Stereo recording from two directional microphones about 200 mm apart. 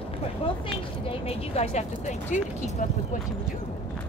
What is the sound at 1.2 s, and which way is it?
Speech, 30° left (ahead or behind).